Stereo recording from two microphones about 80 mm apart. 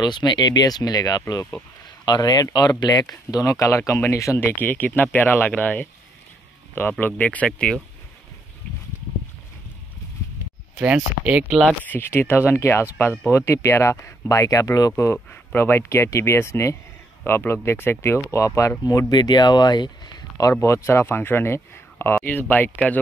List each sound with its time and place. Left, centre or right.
0.0 s speech: left
4.6 s speech: left
10.8 s speech: centre
11.8 s speech: left
18.9 s speech: left
20.6 s speech: left